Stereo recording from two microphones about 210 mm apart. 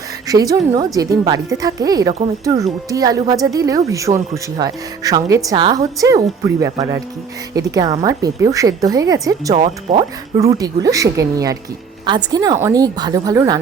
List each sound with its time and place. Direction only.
0.3 s a woman's voice: 15° right (ahead or behind)
9.6 s speech: 30° right (ahead or behind)
10.3 s a woman's voice: 20° right (ahead or behind)